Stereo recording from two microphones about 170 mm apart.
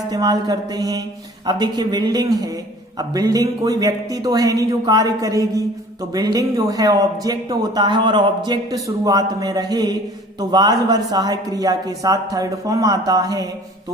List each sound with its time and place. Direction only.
0.1 s a man's voice: 20° right (ahead or behind)